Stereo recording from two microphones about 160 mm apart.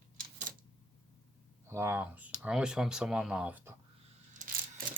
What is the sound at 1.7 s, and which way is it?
Speech, 15° right (ahead or behind).